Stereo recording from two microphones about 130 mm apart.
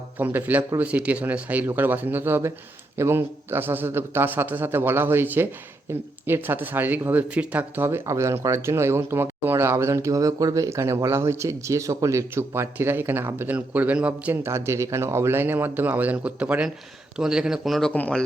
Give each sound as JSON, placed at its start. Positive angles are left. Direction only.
{"t": 0.2, "sound": "a man's voice", "side_deg": -15}
{"t": 7.9, "sound": "speech", "side_deg": -20}